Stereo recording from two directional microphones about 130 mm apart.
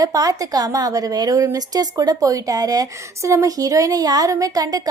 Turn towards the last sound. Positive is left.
turn(degrees=-30)  # may be behind; listen again after turning